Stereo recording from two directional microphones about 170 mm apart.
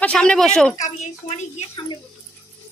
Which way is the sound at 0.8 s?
40° left (ahead or behind).